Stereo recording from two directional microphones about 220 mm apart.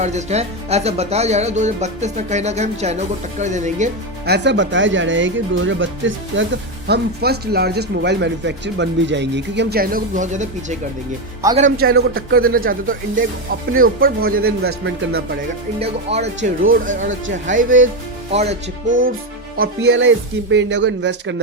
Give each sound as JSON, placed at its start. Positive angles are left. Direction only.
{"t": 0.0, "sound": "speech", "side_deg": -30}
{"t": 4.3, "sound": "speech", "side_deg": -50}
{"t": 14.6, "sound": "speech", "side_deg": -65}
{"t": 15.8, "sound": "speech", "side_deg": -30}
{"t": 17.1, "sound": "speech", "side_deg": -60}
{"t": 17.5, "sound": "speech", "side_deg": -35}
{"t": 18.9, "sound": "speech", "side_deg": -60}